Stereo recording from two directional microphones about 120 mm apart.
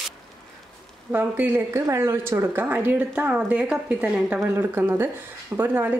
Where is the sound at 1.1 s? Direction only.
15° right (ahead or behind).